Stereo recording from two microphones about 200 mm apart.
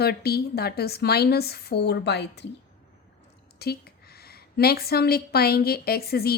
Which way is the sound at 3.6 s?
50° left (ahead or behind).